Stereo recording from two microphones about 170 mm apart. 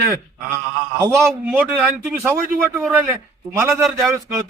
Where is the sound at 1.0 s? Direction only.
15° right (ahead or behind).